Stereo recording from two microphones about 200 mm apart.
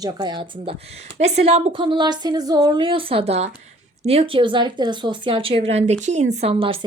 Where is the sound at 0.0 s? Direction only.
20° right (ahead or behind).